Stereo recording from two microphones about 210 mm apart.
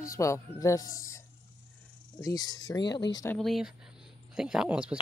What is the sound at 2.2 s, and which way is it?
Speech, 15° left (ahead or behind).